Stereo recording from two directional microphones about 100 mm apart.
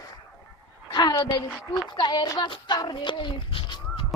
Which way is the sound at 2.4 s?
55° left (ahead or behind).